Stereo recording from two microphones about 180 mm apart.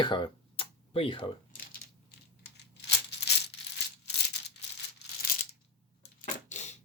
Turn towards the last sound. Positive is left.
turn(degrees=40)  # may be behind; listen again after turning